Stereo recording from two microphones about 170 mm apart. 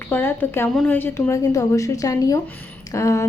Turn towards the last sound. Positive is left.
turn(degrees=20)  # may be behind; listen again after turning